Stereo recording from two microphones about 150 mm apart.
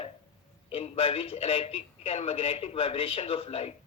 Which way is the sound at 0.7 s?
40° left (ahead or behind).